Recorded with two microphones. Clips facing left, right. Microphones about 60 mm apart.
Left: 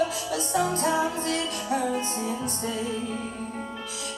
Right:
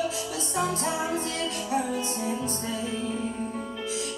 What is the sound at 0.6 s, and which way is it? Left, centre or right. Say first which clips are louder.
Music: left 3 dB; left.